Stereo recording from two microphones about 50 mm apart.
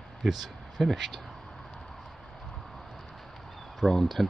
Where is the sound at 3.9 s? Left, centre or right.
Centre.